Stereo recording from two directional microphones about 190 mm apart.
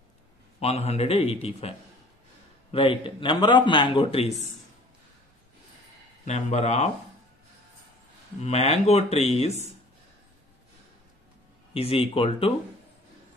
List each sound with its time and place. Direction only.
0.6 s speech: 35° left (ahead or behind)
2.7 s a man's voice: 25° left (ahead or behind)
6.2 s speech: 35° left (ahead or behind)
8.4 s speech: 35° left (ahead or behind)
11.7 s a man's voice: 30° left (ahead or behind)